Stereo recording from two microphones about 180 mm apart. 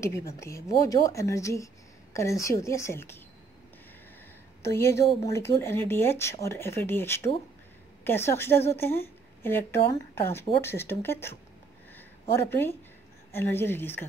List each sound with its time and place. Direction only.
0.0 s speech: 15° left (ahead or behind)
4.6 s a woman's voice: 15° left (ahead or behind)